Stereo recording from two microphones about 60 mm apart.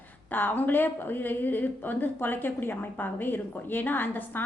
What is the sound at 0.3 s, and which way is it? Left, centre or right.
A woman's voice, left.